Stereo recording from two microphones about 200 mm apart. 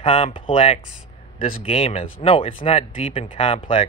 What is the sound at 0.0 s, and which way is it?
Speech, 30° left (ahead or behind).